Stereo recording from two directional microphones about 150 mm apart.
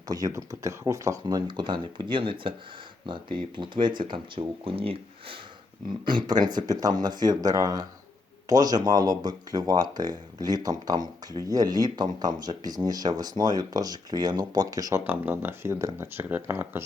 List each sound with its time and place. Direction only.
0.1 s speech: 25° right (ahead or behind)
15.0 s speech: 10° right (ahead or behind)